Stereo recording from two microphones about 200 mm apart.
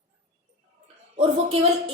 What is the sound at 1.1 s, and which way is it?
Speech, 30° right (ahead or behind).